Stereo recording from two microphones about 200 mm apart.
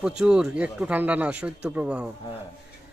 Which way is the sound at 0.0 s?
5° right (ahead or behind).